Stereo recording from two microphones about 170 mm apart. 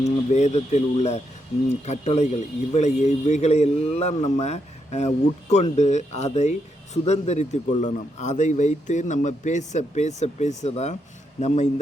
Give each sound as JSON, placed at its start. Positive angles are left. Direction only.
{"t": 0.0, "sound": "a man's voice", "side_deg": 40}